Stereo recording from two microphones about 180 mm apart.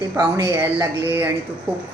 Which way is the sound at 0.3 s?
15° right (ahead or behind).